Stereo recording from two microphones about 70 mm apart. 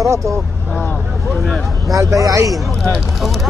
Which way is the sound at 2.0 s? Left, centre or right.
Right.